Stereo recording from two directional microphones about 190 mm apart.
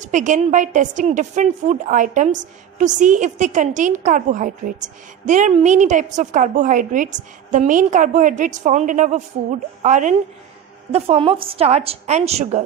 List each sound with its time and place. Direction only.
0.0 s a woman's voice: 40° right (ahead or behind)